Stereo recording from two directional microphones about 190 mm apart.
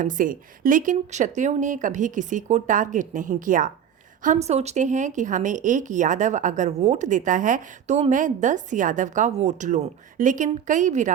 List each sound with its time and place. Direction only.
0.0 s a woman's voice: 45° right (ahead or behind)